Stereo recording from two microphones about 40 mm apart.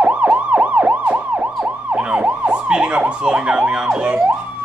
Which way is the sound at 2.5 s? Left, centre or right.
Right.